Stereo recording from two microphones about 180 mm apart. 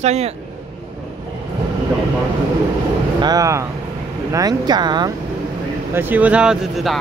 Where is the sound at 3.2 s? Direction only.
20° right (ahead or behind).